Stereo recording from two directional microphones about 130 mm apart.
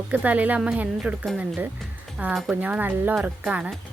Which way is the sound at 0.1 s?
10° right (ahead or behind).